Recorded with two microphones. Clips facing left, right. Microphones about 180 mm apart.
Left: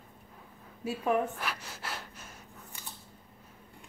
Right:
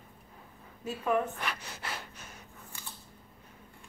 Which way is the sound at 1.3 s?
Centre (ahead or behind).